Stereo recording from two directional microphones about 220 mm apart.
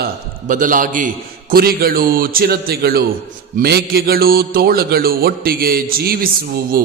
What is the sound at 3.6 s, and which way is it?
Mantra, 45° right (ahead or behind).